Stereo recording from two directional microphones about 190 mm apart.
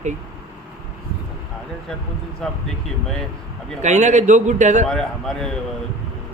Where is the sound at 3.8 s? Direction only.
35° right (ahead or behind).